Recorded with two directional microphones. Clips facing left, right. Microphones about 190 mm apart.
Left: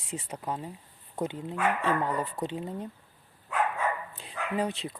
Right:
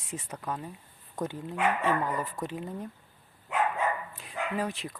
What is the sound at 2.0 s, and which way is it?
Speech, 30° left (ahead or behind).